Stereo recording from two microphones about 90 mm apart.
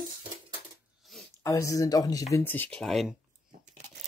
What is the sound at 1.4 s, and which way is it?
Speech, 35° left (ahead or behind).